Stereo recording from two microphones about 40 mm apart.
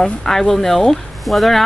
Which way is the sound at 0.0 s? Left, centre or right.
Centre.